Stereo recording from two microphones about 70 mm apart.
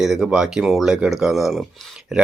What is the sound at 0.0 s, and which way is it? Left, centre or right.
Speech, centre.